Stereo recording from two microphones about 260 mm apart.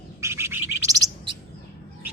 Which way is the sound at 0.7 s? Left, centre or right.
Left.